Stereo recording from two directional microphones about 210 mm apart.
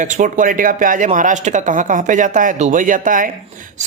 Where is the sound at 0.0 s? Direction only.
35° right (ahead or behind).